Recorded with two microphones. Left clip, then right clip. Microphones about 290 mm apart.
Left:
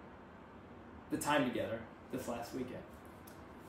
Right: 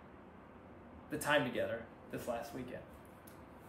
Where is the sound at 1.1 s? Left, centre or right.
Centre.